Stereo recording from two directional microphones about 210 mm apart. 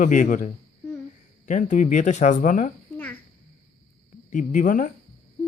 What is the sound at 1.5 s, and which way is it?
Speech, 35° left (ahead or behind).